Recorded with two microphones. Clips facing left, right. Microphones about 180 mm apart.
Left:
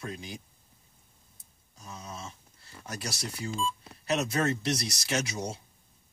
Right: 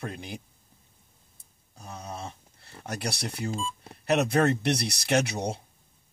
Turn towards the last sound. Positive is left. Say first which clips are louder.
# right 6 dB
turn(degrees=-60)  # may be behind; listen again after turning